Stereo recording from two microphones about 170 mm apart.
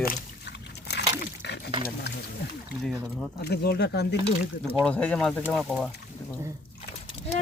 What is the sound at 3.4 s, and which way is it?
Speech, 70° left (ahead or behind).